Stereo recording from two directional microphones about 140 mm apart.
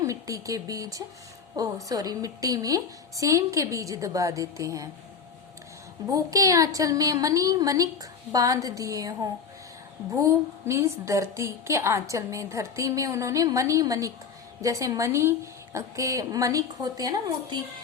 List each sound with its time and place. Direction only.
0.0 s a woman's voice: 25° right (ahead or behind)
6.1 s a woman's voice: 25° right (ahead or behind)